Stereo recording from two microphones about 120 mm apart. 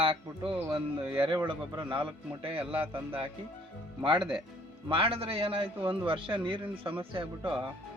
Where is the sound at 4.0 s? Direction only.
45° right (ahead or behind).